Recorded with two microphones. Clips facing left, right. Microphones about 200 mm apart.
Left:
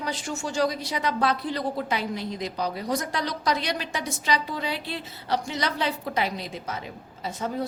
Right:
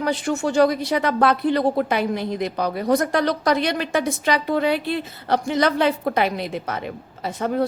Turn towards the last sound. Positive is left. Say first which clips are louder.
# right 7 dB
turn(degrees=-65)  # may be behind; listen again after turning